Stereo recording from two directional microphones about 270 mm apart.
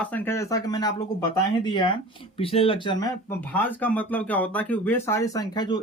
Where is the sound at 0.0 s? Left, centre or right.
Centre.